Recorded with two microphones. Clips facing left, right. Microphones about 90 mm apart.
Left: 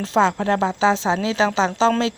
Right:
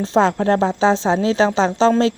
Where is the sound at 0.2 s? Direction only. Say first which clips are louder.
Right 2 dB; 40° right (ahead or behind).